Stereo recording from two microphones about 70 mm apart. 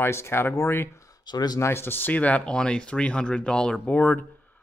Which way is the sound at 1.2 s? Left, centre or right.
Left.